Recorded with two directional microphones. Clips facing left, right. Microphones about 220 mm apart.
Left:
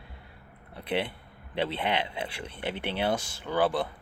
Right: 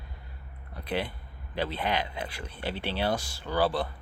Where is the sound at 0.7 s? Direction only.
25° left (ahead or behind).